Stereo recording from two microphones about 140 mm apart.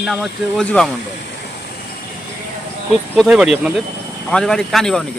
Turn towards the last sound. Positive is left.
turn(degrees=5)  # may be behind; listen again after turning